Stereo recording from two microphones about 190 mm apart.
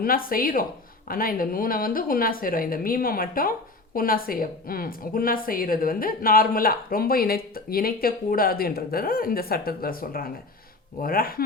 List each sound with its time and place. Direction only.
0.0 s speech: 50° left (ahead or behind)